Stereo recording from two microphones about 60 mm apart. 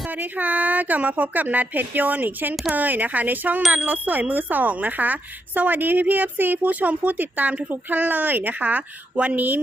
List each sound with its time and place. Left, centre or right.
0.1 s speech: right